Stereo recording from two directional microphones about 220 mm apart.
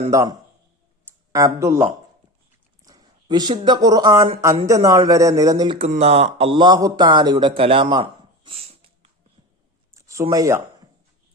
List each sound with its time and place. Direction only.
0.1 s speech: 15° right (ahead or behind)
8.4 s dog: 25° right (ahead or behind)
9.9 s a sound: 15° right (ahead or behind)